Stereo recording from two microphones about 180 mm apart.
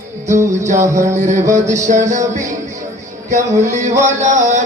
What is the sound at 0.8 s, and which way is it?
Music, 15° right (ahead or behind).